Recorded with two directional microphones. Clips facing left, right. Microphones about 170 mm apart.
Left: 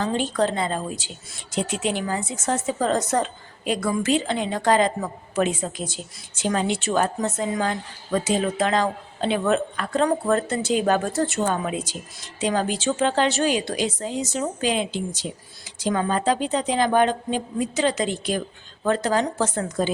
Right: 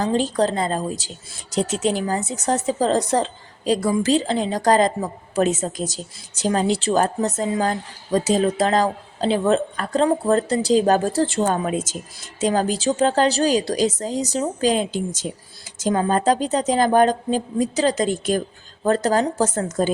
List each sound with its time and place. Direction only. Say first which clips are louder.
0.0 s a woman's voice: right 3 dB; 35° right (ahead or behind)